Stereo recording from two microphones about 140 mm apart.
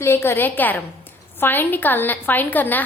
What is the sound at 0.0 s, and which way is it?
A woman's voice, 15° left (ahead or behind).